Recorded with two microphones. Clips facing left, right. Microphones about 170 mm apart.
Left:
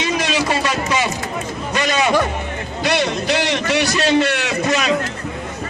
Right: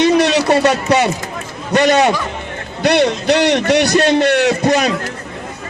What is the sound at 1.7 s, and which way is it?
A man's voice, 60° right (ahead or behind).